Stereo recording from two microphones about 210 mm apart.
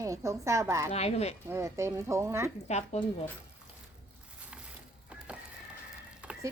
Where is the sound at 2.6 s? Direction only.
30° left (ahead or behind).